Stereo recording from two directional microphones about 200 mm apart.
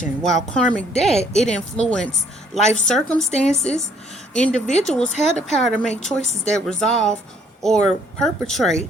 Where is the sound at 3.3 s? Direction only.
35° left (ahead or behind).